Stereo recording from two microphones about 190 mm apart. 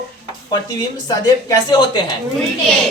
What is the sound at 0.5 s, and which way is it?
Speech, 20° left (ahead or behind).